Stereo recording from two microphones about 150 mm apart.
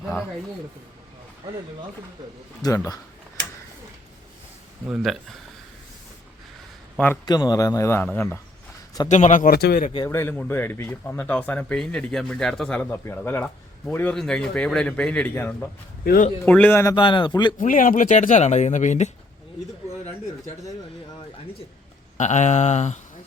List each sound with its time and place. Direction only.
0.0 s a sound: centre (ahead or behind)
2.6 s a man's voice: 25° left (ahead or behind)
4.9 s speech: 5° right (ahead or behind)
7.3 s a man's voice: 25° left (ahead or behind)
9.0 s speech: 55° left (ahead or behind); by 9.9 s 80° left
10.1 s a man's voice: 15° left (ahead or behind)
12.8 s a man's voice: 15° left (ahead or behind)
16.9 s speech: 35° left (ahead or behind)
17.6 s speech: 65° left (ahead or behind)
22.2 s speech: 50° left (ahead or behind)